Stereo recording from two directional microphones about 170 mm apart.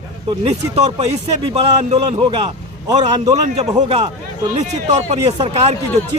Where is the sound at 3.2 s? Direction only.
40° right (ahead or behind).